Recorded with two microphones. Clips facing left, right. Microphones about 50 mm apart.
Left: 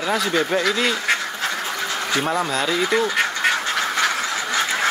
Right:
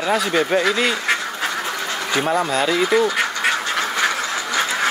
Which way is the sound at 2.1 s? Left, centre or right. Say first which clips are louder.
Right 3 dB; centre.